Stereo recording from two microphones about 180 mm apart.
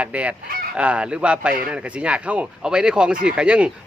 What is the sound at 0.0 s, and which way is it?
Speech, 5° right (ahead or behind).